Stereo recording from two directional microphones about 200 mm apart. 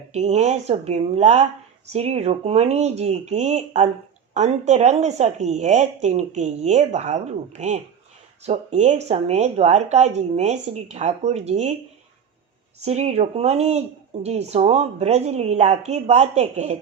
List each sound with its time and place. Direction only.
0.1 s speech: 35° right (ahead or behind)
12.8 s speech: 35° right (ahead or behind)